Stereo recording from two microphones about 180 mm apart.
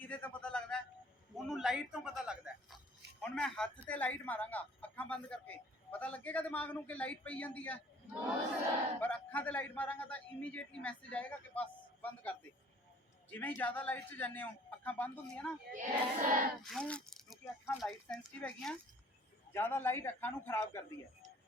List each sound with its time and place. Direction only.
0.0 s a sound: 10° left (ahead or behind)
1.5 s speech: centre (ahead or behind)
9.0 s speech: 10° left (ahead or behind)
15.7 s child singing: 45° right (ahead or behind)
16.6 s speech: 5° left (ahead or behind)